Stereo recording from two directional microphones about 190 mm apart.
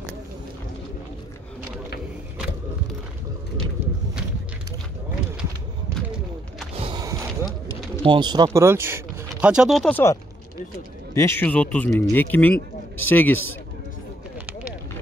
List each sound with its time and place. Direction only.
6.8 s music: 20° right (ahead or behind)
8.0 s speech: 25° right (ahead or behind); by 10.1 s 10° left (ahead or behind)
11.1 s speech: 10° left (ahead or behind)